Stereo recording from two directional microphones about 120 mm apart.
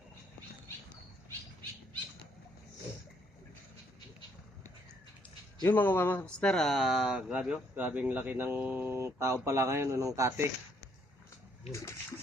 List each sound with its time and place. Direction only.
5.6 s speech: 15° left (ahead or behind); by 10.5 s 25° right (ahead or behind)
11.7 s speech: 25° left (ahead or behind)